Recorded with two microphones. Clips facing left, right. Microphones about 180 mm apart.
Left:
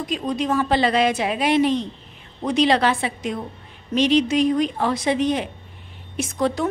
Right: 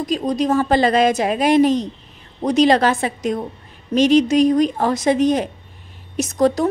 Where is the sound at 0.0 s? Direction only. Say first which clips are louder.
Right 5 dB; 40° right (ahead or behind).